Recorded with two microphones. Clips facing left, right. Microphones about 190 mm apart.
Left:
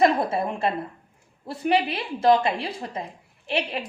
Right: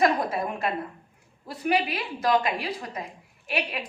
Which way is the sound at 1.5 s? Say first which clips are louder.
Left 3 dB; 30° left (ahead or behind).